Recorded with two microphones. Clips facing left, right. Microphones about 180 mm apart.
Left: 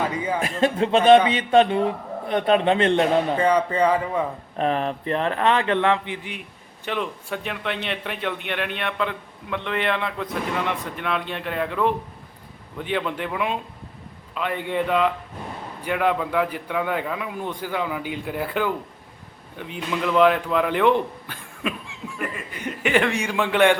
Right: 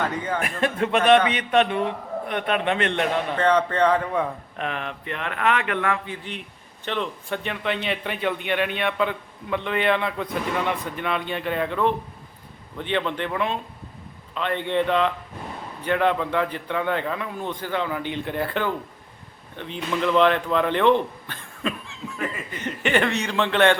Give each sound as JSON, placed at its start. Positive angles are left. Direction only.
{"t": 0.0, "sound": "speech", "side_deg": 10}
{"t": 0.3, "sound": "a man's voice", "side_deg": 25}
{"t": 3.3, "sound": "speech", "side_deg": 10}
{"t": 4.5, "sound": "a man's voice", "side_deg": 35}
{"t": 6.8, "sound": "a man's voice", "side_deg": 5}